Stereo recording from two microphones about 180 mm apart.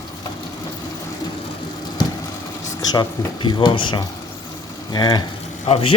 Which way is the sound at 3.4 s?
25° left (ahead or behind).